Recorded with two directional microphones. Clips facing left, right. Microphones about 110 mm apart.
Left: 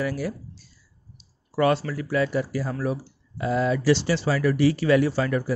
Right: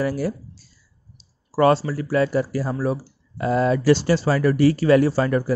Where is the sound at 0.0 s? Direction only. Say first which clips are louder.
Right 4 dB; 40° right (ahead or behind).